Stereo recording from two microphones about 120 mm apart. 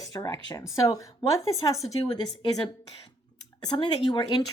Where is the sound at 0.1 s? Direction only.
25° left (ahead or behind).